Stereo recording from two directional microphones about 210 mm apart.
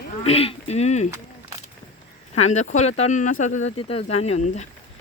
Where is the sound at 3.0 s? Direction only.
35° left (ahead or behind).